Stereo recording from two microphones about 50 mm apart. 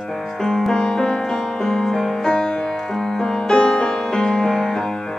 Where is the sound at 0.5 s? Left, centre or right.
Centre.